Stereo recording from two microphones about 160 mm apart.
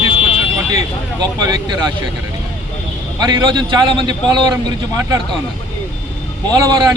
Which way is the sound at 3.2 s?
25° right (ahead or behind).